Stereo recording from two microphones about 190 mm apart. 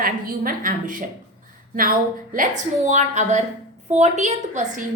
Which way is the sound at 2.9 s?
40° right (ahead or behind).